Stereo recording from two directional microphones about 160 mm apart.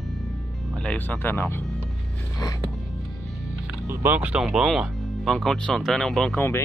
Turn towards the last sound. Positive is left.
turn(degrees=15)  # may be behind; listen again after turning